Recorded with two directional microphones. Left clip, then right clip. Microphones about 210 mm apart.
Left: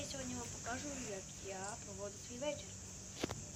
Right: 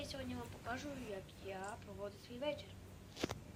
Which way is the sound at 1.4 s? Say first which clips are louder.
Even; centre (ahead or behind).